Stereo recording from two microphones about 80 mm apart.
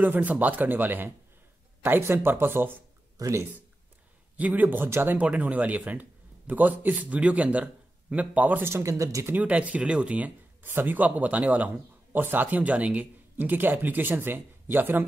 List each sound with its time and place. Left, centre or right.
0.0 s a man's voice: right
3.2 s speech: right
4.4 s a man's voice: right
5.2 s a man's voice: centre
8.7 s speech: right
9.3 s a man's voice: centre